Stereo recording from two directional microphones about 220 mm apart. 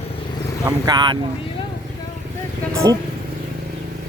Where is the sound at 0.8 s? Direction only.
20° right (ahead or behind).